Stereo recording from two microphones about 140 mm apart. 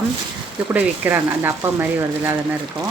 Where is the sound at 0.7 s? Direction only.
15° right (ahead or behind).